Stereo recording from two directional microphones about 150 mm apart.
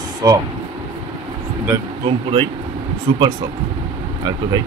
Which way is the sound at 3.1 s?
35° right (ahead or behind).